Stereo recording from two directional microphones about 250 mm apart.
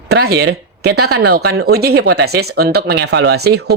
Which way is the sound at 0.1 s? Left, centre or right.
Right.